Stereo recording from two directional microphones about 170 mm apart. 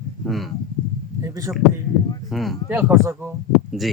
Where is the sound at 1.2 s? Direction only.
20° right (ahead or behind).